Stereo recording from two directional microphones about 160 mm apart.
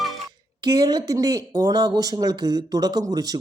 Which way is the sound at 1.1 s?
25° right (ahead or behind).